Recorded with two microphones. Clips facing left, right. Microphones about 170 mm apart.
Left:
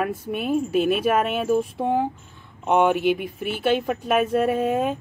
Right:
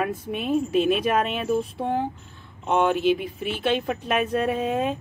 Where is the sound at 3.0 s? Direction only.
60° left (ahead or behind).